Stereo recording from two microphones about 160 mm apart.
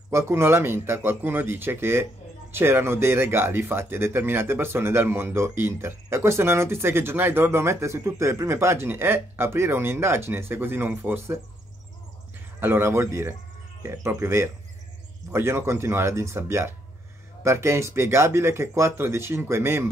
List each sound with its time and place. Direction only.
0.1 s speech: 15° right (ahead or behind)
12.5 s speech: 15° right (ahead or behind)